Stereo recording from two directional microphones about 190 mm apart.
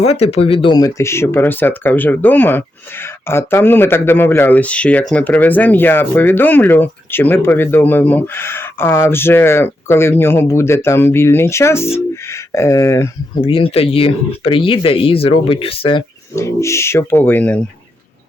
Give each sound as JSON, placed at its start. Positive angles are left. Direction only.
{"t": 0.0, "sound": "speech", "side_deg": 35}
{"t": 13.4, "sound": "speech", "side_deg": 30}
{"t": 16.3, "sound": "speech", "side_deg": 15}